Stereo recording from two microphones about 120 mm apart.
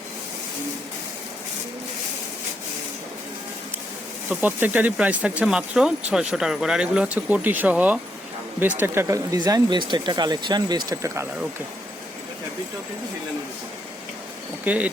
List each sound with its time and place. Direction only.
4.3 s speech: 15° right (ahead or behind)
8.8 s speech: 25° right (ahead or behind)
14.6 s speech: 10° right (ahead or behind)